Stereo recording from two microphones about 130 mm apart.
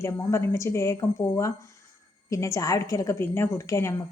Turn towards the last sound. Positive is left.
turn(degrees=20)  # may be behind; listen again after turning